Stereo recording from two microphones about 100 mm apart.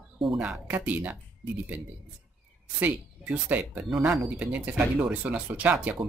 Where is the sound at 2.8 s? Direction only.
15° right (ahead or behind).